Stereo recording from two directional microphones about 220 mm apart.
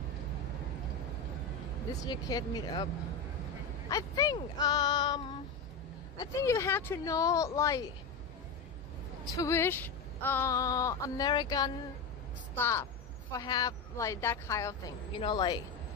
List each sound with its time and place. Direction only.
2.0 s a woman's voice: 15° left (ahead or behind)
3.9 s a woman's voice: 15° left (ahead or behind)
9.3 s a woman's voice: 15° left (ahead or behind)